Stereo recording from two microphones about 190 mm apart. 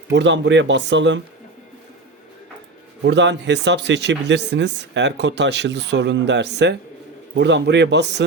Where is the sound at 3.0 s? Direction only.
65° right (ahead or behind).